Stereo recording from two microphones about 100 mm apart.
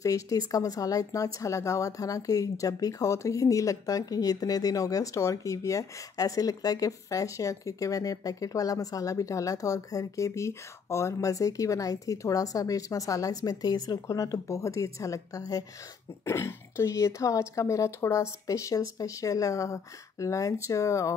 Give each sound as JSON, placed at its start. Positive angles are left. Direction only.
{"t": 0.0, "sound": "a woman's voice", "side_deg": 35}
{"t": 16.3, "sound": "a woman's voice", "side_deg": 25}